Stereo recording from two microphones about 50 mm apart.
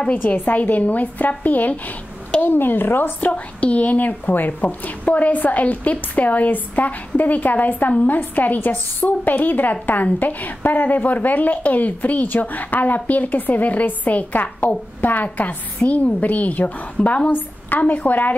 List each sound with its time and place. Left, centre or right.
0.0 s a woman's voice: left
3.2 s a woman's voice: left
17.3 s a woman's voice: left